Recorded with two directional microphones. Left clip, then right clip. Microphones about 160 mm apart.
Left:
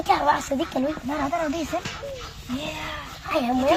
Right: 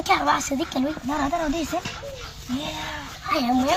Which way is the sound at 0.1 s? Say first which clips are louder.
Even; 5° right (ahead or behind).